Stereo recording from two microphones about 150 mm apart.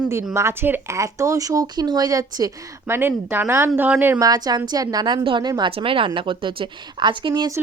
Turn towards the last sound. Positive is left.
turn(degrees=-30)  # may be behind; listen again after turning